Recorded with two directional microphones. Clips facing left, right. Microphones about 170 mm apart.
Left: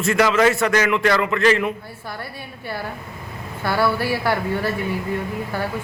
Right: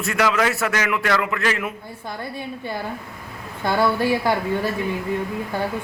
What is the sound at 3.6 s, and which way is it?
Speech, 20° right (ahead or behind).